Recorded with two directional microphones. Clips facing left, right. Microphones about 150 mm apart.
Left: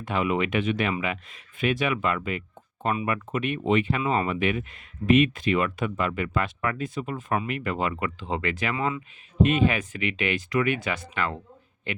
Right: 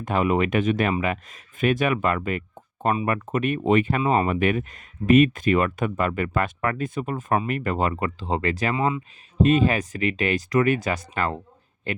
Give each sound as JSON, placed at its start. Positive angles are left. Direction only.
{"t": 0.0, "sound": "speech", "side_deg": -45}
{"t": 8.7, "sound": "speech", "side_deg": -25}
{"t": 9.4, "sound": "speech", "side_deg": -35}